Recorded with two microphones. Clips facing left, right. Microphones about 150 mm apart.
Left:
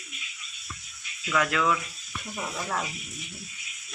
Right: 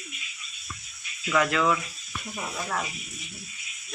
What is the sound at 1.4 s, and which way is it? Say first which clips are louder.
Speech: right 2 dB; centre (ahead or behind).